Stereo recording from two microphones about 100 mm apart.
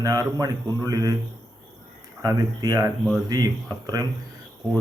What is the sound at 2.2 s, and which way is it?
Speech, 35° right (ahead or behind).